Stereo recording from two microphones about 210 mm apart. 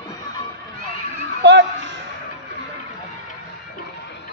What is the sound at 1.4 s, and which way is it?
Children playing, 55° right (ahead or behind).